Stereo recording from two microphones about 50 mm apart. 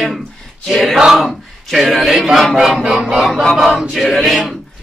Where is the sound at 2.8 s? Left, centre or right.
Centre.